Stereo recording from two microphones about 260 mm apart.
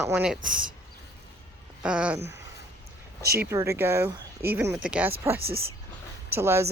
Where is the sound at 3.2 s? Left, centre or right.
Right.